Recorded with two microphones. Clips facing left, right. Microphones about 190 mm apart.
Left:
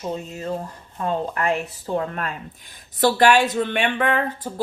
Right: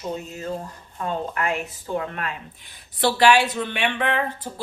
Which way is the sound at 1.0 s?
35° left (ahead or behind).